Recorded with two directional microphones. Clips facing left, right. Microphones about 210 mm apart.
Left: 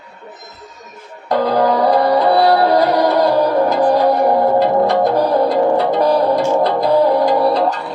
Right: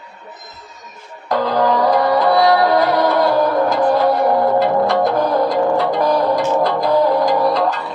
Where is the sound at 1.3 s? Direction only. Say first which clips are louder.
Left 2 dB; 35° left (ahead or behind).